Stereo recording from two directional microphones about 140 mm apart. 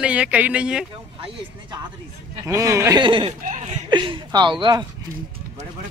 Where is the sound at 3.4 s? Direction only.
60° right (ahead or behind).